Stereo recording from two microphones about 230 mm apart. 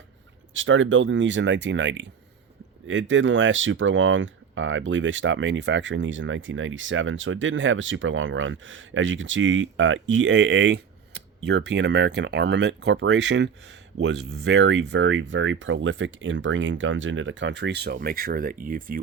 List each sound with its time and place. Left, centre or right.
0.5 s speech: right